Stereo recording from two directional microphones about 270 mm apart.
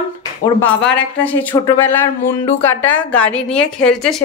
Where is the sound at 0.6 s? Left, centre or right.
Left.